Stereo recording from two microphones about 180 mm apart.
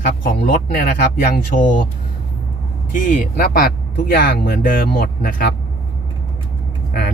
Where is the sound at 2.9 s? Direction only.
50° left (ahead or behind).